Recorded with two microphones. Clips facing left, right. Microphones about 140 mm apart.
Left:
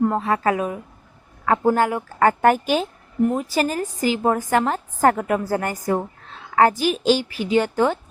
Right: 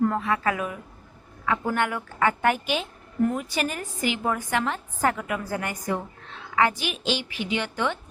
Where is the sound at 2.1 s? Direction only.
45° left (ahead or behind).